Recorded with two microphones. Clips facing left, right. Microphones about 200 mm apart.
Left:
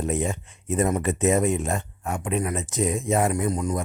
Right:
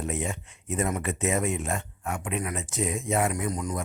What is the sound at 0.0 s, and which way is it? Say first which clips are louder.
A man's voice: left 5 dB; 35° left (ahead or behind).